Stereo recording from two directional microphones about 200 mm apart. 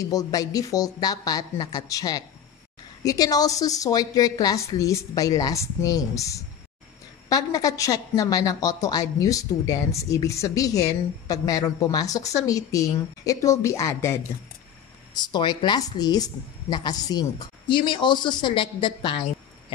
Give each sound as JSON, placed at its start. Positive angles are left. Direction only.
{"t": 0.0, "sound": "a woman's voice", "side_deg": 20}